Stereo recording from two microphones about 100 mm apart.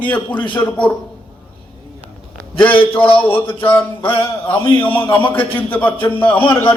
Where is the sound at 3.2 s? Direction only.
20° left (ahead or behind).